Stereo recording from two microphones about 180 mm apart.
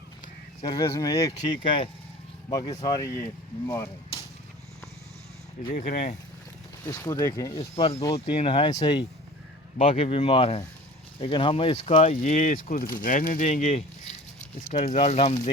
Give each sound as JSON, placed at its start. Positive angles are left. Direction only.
{"t": 0.6, "sound": "speech", "side_deg": 25}
{"t": 5.7, "sound": "speech", "side_deg": 50}
{"t": 6.8, "sound": "speech", "side_deg": 20}
{"t": 7.6, "sound": "speech", "side_deg": 35}
{"t": 9.7, "sound": "speech", "side_deg": 35}